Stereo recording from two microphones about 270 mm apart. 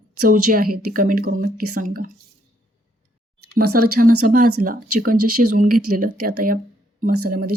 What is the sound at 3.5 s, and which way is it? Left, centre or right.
A woman's voice, right.